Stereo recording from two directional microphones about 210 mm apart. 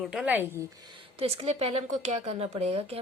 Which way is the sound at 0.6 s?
20° right (ahead or behind).